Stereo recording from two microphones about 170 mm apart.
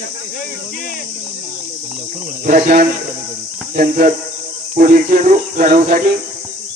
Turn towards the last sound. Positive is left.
turn(degrees=-50)  # may be behind; listen again after turning